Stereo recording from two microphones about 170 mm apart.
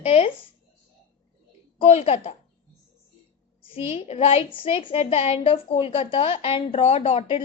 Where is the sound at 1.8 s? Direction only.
35° left (ahead or behind).